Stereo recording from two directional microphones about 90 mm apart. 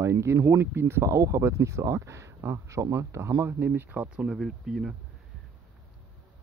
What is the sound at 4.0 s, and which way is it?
Speech, 5° right (ahead or behind).